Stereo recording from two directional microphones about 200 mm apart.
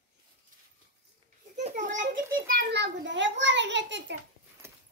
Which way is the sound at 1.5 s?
35° right (ahead or behind).